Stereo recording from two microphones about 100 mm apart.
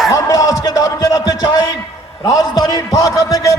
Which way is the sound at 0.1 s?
35° left (ahead or behind).